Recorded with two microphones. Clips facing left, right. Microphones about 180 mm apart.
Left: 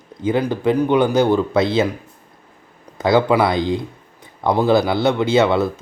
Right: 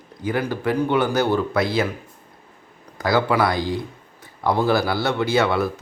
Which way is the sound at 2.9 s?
20° left (ahead or behind).